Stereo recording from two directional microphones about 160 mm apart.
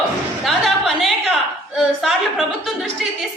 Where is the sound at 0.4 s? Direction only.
Centre (ahead or behind).